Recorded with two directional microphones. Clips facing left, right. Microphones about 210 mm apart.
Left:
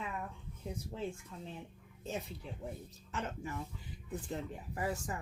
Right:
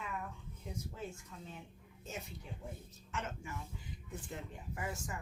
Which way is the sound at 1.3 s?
35° left (ahead or behind).